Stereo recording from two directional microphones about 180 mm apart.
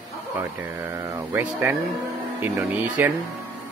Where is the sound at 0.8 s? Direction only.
15° right (ahead or behind).